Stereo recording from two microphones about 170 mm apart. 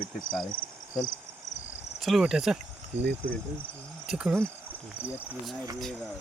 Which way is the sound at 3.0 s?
85° right.